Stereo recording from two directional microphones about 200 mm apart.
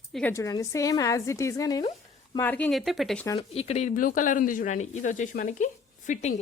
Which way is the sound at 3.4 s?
30° left (ahead or behind).